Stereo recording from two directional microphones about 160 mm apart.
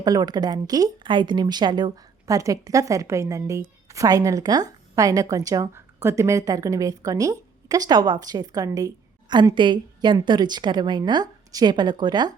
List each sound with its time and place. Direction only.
0.0 s a woman's voice: 25° right (ahead or behind)